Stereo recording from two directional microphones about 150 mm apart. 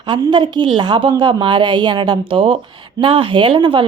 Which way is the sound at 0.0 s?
30° right (ahead or behind).